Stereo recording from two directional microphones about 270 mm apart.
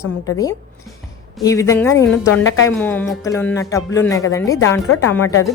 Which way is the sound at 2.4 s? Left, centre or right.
Left.